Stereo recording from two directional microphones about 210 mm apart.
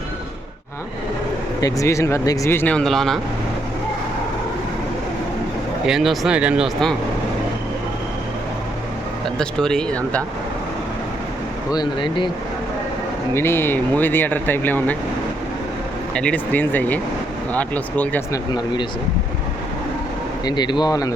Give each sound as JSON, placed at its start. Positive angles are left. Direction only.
{"t": 1.6, "sound": "speech", "side_deg": 15}
{"t": 5.8, "sound": "speech", "side_deg": 0}
{"t": 9.2, "sound": "speech", "side_deg": 5}
{"t": 11.7, "sound": "speech", "side_deg": 20}
{"t": 13.3, "sound": "speech", "side_deg": 10}
{"t": 16.1, "sound": "speech", "side_deg": 5}
{"t": 20.4, "sound": "speech", "side_deg": 20}